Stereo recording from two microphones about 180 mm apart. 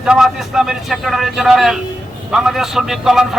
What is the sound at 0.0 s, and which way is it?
A man's voice, centre (ahead or behind).